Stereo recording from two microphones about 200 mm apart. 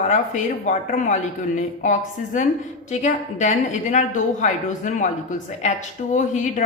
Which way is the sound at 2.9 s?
35° left (ahead or behind).